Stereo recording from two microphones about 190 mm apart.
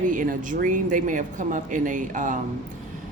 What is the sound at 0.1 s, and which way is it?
Speech, 45° right (ahead or behind).